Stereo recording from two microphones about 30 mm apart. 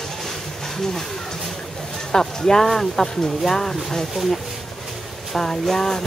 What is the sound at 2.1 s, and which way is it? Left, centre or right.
Speech, left.